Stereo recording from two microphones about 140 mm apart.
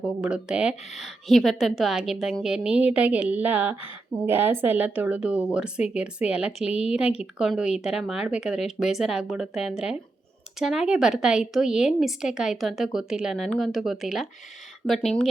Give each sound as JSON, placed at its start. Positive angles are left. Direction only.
{"t": 0.0, "sound": "a woman's voice", "side_deg": -5}